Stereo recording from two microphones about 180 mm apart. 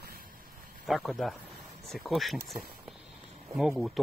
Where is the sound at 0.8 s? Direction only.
Centre (ahead or behind).